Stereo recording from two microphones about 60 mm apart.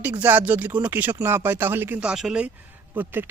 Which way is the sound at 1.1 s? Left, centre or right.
Right.